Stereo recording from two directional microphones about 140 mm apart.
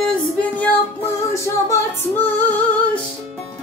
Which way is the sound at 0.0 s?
10° left (ahead or behind).